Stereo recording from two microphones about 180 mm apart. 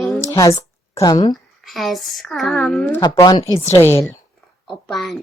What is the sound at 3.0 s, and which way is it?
A woman's voice, 20° left (ahead or behind).